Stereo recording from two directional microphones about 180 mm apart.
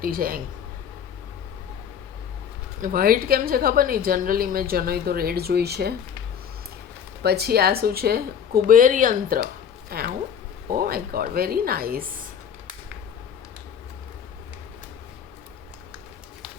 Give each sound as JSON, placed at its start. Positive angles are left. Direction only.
{"t": 0.0, "sound": "speech", "side_deg": -55}
{"t": 2.8, "sound": "a woman's voice", "side_deg": -55}
{"t": 7.2, "sound": "a woman's voice", "side_deg": -60}